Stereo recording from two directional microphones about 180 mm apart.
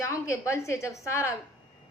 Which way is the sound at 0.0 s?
15° left (ahead or behind).